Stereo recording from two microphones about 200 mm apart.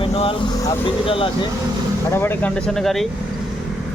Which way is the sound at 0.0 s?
25° left (ahead or behind).